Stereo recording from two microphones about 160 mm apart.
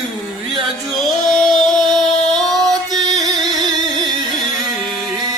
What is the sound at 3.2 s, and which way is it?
Music, 25° right (ahead or behind).